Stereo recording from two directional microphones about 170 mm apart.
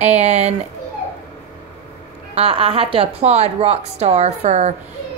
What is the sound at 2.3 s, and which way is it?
A woman's voice, 35° right (ahead or behind).